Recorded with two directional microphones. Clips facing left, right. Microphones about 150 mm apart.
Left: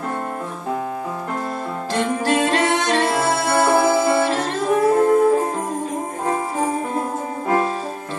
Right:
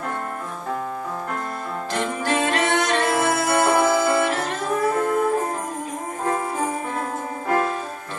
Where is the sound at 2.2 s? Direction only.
30° left (ahead or behind).